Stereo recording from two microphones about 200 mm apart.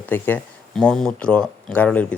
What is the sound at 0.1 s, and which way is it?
Speech, 10° left (ahead or behind).